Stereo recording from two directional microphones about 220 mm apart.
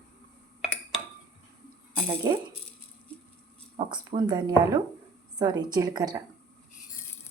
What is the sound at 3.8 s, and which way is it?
Speech, 20° right (ahead or behind).